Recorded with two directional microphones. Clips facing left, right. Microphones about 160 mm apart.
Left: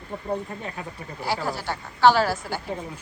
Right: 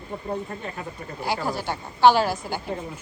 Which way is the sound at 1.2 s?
15° right (ahead or behind).